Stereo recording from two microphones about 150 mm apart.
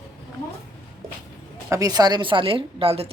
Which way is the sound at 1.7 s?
25° right (ahead or behind).